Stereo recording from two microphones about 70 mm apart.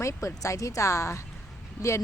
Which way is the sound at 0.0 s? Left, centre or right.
Left.